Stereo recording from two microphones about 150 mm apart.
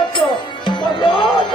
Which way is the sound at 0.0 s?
35° left (ahead or behind).